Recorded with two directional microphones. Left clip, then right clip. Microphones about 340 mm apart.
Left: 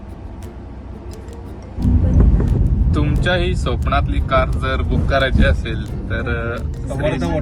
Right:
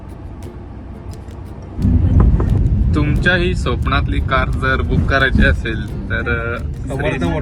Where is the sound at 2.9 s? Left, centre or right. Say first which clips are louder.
Right 3 dB; centre.